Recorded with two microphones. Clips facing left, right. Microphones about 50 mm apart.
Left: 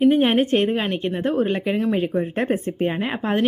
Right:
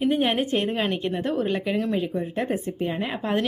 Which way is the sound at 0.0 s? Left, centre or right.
Left.